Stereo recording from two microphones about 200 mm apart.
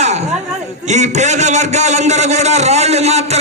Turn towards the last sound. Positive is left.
turn(degrees=-30)  # may be behind; listen again after turning